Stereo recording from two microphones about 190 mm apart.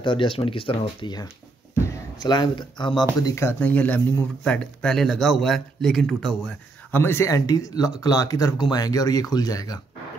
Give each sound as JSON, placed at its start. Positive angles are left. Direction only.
{"t": 0.0, "sound": "speech", "side_deg": 25}